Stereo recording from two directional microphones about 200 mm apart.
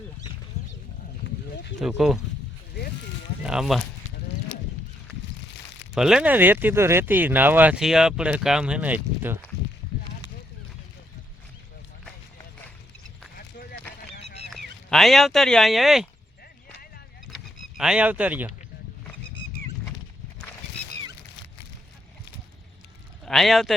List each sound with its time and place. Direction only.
1.8 s speech: centre (ahead or behind)
3.4 s speech: 5° right (ahead or behind)
5.9 s speech: 5° right (ahead or behind)
13.3 s clip-clop: 50° left (ahead or behind)
14.5 s speech: centre (ahead or behind)
17.3 s speech: 5° right (ahead or behind)
23.2 s speech: centre (ahead or behind)